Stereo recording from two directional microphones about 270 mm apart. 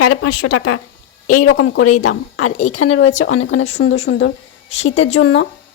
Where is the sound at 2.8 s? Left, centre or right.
Left.